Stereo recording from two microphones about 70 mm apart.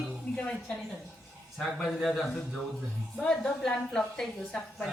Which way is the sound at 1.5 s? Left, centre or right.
Centre.